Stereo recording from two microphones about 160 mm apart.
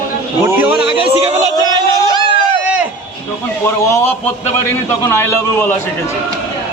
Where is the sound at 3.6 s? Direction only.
15° left (ahead or behind).